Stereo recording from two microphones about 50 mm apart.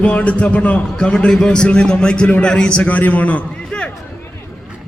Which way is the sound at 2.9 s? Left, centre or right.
Left.